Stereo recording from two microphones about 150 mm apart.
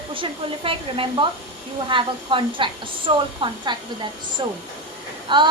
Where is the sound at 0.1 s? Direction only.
35° right (ahead or behind).